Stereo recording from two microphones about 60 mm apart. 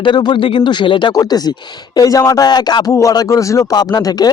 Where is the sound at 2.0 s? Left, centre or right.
Left.